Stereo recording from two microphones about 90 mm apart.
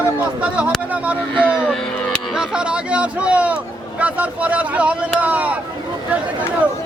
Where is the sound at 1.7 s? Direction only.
5° left (ahead or behind).